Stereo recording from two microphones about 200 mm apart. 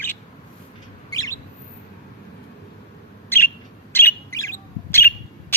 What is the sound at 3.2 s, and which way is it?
Bird, 10° left (ahead or behind).